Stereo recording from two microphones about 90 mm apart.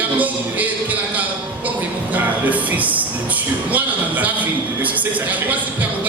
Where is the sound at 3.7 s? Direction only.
15° right (ahead or behind).